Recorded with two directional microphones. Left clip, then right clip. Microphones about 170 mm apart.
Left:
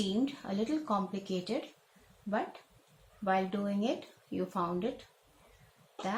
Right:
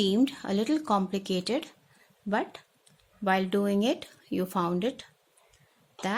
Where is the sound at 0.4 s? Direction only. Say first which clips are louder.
Right 6 dB; 70° right (ahead or behind).